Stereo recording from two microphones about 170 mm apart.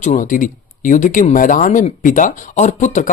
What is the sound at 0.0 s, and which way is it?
Speech, 45° left (ahead or behind).